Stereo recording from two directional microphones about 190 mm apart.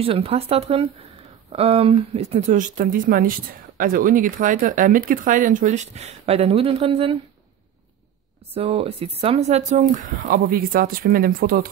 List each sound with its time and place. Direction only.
0.0 s speech: 30° right (ahead or behind)
8.5 s speech: 30° right (ahead or behind); by 11.7 s 50° right (ahead or behind)